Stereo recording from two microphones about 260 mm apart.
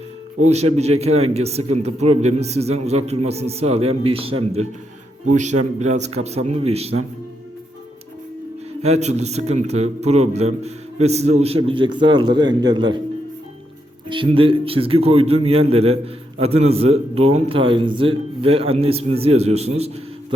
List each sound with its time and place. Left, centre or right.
0.4 s a man's voice: right
8.8 s a man's voice: right
14.1 s a man's voice: centre